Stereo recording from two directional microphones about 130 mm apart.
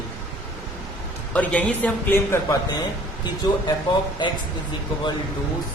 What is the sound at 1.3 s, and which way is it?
A man's voice, 10° left (ahead or behind).